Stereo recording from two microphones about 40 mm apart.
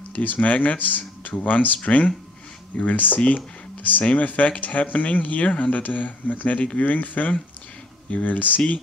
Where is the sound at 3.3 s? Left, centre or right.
Left.